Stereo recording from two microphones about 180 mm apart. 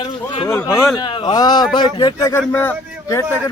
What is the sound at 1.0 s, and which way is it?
A man's voice, 25° left (ahead or behind).